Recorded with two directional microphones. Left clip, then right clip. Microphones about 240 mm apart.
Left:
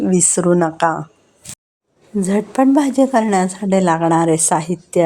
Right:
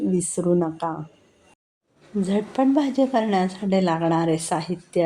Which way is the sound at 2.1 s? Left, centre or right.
Left.